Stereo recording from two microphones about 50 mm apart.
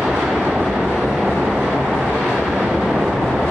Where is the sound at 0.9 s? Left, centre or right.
Centre.